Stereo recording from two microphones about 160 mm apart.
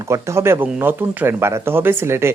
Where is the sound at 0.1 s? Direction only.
15° right (ahead or behind).